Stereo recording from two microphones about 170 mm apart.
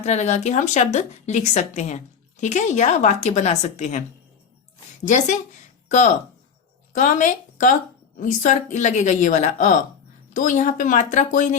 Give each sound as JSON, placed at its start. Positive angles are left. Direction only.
{"t": 0.0, "sound": "a woman's voice", "side_deg": 40}
{"t": 5.0, "sound": "speech", "side_deg": 45}
{"t": 6.9, "sound": "speech", "side_deg": 50}